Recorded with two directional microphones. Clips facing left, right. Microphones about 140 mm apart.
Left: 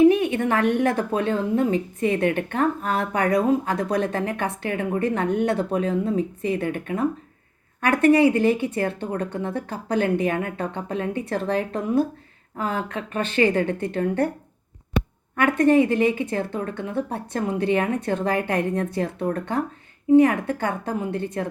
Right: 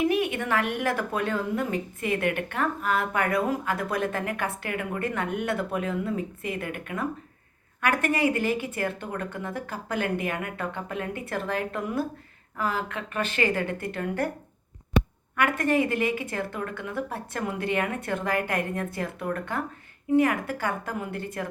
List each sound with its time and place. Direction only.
0.0 s speech: 30° left (ahead or behind)
15.4 s speech: 30° left (ahead or behind)